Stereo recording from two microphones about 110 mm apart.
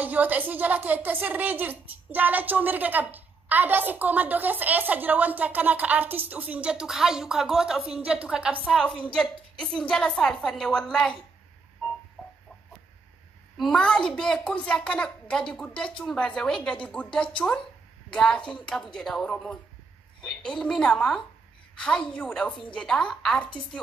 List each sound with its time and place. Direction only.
0.0 s a woman's voice: 15° right (ahead or behind)
8.6 s a child's voice: 5° left (ahead or behind)
13.6 s a child's voice: 5° left (ahead or behind)